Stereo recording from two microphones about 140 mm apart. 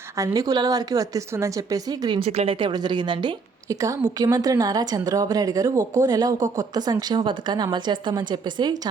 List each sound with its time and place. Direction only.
0.3 s a woman's voice: 25° right (ahead or behind)
2.2 s speech: 45° right (ahead or behind)
2.6 s a woman's voice: 35° right (ahead or behind)